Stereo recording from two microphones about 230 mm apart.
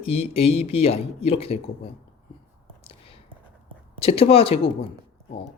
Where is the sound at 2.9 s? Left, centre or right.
Left.